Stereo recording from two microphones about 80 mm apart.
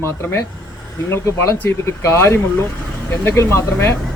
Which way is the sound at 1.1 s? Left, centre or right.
Left.